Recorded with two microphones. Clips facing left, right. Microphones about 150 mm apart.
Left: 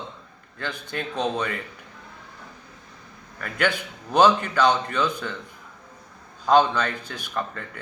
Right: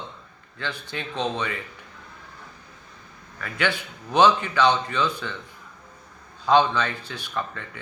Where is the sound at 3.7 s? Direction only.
10° left (ahead or behind).